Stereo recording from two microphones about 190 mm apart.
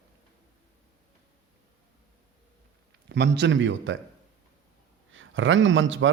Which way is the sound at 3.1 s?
65° right (ahead or behind).